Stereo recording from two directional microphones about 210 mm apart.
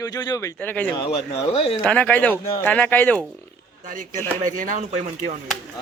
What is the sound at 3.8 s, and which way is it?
Speech, 40° right (ahead or behind).